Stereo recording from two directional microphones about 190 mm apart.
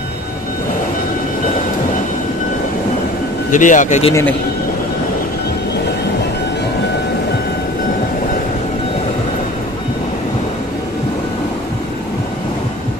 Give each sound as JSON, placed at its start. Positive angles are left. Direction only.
{"t": 3.5, "sound": "speech", "side_deg": 40}
{"t": 4.1, "sound": "speech", "side_deg": 15}